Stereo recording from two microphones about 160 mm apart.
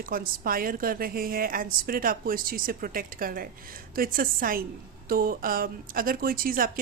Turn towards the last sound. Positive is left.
turn(degrees=-65)  # may be behind; listen again after turning